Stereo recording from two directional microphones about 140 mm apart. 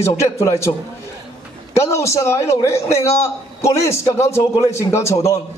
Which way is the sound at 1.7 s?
20° left (ahead or behind).